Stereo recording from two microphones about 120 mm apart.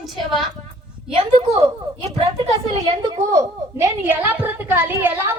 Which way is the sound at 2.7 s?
40° right (ahead or behind).